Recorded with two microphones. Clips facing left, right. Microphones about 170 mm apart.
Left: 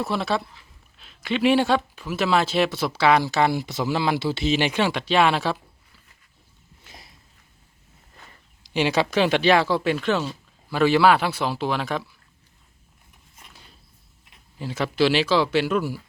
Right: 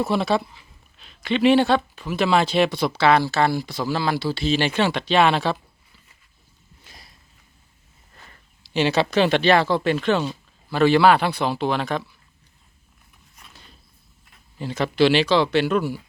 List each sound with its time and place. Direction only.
0.0 s speech: centre (ahead or behind)
6.8 s a sound: 25° left (ahead or behind)
8.3 s a man's voice: 10° left (ahead or behind)
14.6 s a man's voice: 5° left (ahead or behind)